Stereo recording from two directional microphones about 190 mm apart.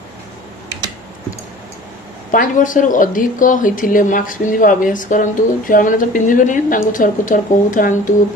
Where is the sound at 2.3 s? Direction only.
45° left (ahead or behind).